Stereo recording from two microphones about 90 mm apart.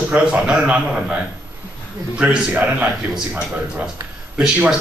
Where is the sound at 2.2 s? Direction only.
10° right (ahead or behind).